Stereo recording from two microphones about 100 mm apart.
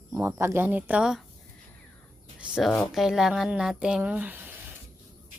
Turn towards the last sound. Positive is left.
turn(degrees=-15)  # may be behind; listen again after turning